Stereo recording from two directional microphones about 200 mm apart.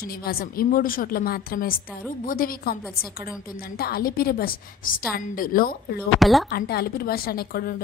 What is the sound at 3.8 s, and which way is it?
A woman's voice, 50° left (ahead or behind).